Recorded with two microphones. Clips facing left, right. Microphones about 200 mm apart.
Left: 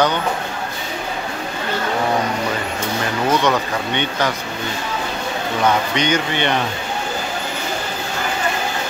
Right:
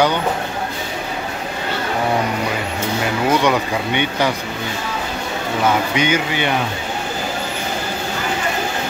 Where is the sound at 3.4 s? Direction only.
10° right (ahead or behind).